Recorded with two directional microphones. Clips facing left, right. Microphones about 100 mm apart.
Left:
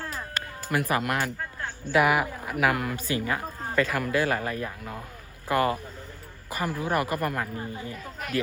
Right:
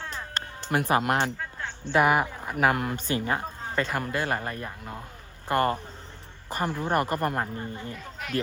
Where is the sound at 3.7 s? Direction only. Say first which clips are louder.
Left 3 dB; 30° right (ahead or behind).